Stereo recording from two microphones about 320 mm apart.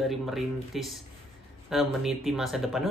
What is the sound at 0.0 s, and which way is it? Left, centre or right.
Speech, centre.